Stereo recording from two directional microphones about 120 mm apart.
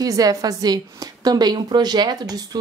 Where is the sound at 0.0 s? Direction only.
30° right (ahead or behind).